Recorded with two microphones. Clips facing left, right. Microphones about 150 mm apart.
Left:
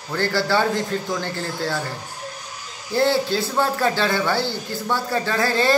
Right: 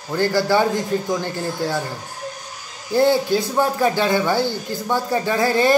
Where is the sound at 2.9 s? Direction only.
15° right (ahead or behind).